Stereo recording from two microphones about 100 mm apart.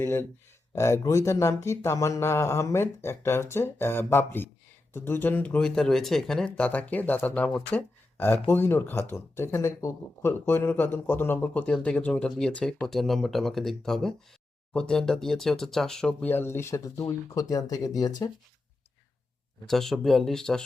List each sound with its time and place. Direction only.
0.0 s speech: 25° left (ahead or behind); by 16.3 s 5° left (ahead or behind)
16.3 s speech: 25° left (ahead or behind); by 18.3 s 40° left (ahead or behind)
19.6 s speech: centre (ahead or behind)